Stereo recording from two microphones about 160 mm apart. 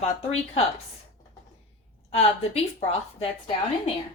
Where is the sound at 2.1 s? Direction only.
40° left (ahead or behind).